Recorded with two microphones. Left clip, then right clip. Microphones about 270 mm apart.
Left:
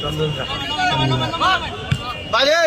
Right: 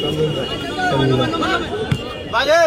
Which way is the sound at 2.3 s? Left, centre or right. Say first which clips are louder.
Right 1 dB; left.